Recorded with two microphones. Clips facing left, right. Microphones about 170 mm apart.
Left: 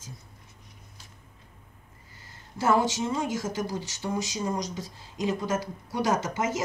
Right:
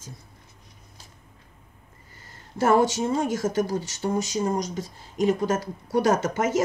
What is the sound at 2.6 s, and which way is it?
Speech, 50° right (ahead or behind).